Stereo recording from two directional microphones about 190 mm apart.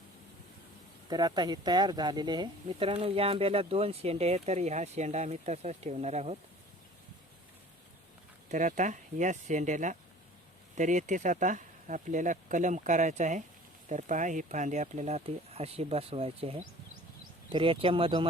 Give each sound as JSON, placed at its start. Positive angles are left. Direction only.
{"t": 1.1, "sound": "speech", "side_deg": -20}
{"t": 8.4, "sound": "speech", "side_deg": -40}